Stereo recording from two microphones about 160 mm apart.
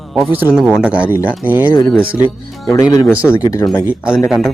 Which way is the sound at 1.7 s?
15° left (ahead or behind).